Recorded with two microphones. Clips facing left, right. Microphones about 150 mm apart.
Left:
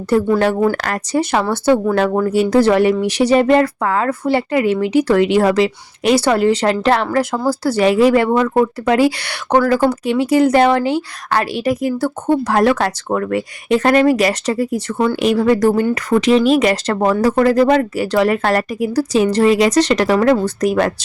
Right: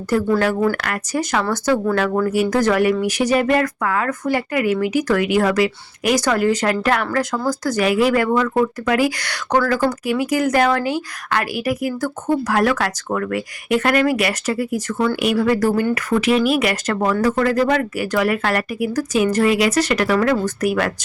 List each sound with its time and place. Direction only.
0.3 s speech: 25° left (ahead or behind)